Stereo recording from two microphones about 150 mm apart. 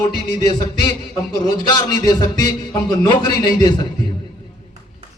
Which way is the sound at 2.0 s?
25° left (ahead or behind).